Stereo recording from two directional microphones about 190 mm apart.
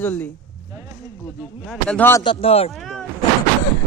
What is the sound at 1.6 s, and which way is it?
Speech, 5° left (ahead or behind).